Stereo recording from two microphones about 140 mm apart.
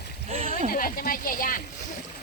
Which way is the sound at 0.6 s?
90° left.